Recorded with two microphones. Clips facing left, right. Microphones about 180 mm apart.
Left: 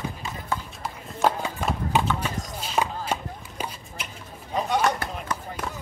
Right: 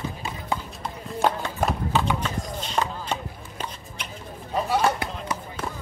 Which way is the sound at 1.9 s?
15° left (ahead or behind).